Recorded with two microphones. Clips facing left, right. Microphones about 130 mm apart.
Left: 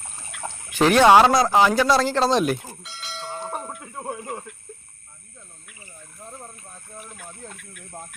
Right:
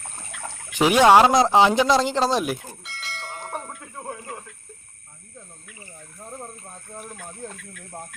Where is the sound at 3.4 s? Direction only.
15° left (ahead or behind).